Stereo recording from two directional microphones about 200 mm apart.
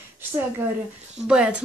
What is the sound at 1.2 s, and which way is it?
Speech, 5° right (ahead or behind).